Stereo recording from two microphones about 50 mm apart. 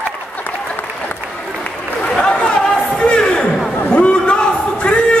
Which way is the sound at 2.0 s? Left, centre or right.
Centre.